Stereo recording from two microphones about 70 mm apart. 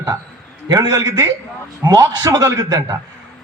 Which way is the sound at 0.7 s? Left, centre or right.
Right.